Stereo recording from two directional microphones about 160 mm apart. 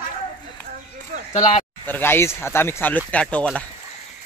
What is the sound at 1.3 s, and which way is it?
Speech, 50° left (ahead or behind).